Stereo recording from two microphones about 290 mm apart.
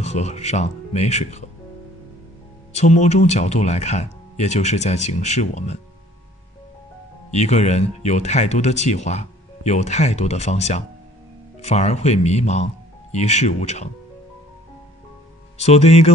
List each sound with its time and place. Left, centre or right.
0.0 s speech: left
2.7 s speech: left
7.2 s speech: left
15.5 s speech: left